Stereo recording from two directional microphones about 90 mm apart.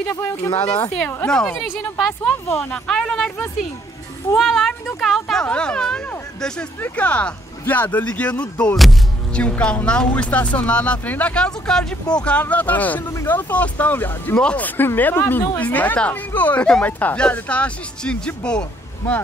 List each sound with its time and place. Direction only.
0.0 s speech: 20° left (ahead or behind)